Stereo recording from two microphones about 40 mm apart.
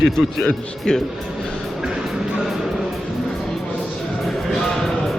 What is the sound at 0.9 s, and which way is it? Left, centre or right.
Speech, centre.